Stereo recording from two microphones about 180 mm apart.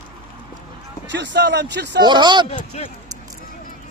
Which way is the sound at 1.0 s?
75° right (ahead or behind).